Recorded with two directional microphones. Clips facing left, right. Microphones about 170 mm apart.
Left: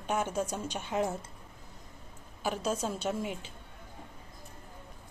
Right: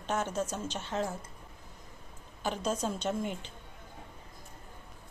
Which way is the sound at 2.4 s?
5° left (ahead or behind).